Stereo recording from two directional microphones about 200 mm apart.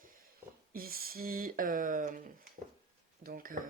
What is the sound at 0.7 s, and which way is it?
Speech, 45° right (ahead or behind).